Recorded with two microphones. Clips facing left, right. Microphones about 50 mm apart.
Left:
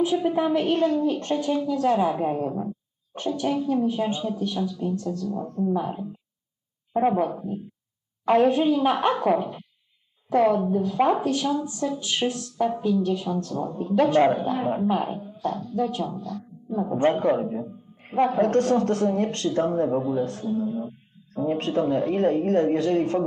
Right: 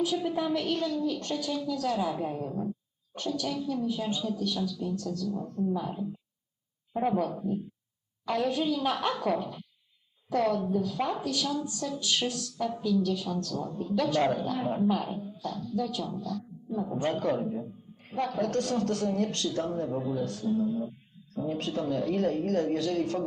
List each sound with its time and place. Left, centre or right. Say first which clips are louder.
0.0 s a woman's voice: left 7 dB; left
8.2 s a woman's voice: left 9 dB; left